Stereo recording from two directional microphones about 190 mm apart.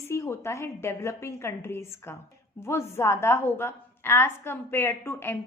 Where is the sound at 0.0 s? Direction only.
15° left (ahead or behind).